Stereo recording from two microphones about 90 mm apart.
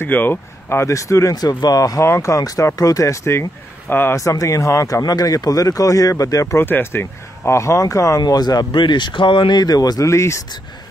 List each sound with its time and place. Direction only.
0.0 s speech: 25° left (ahead or behind)
4.2 s speech: 35° left (ahead or behind)
8.2 s speech: 50° left (ahead or behind); by 10.4 s 35° left (ahead or behind)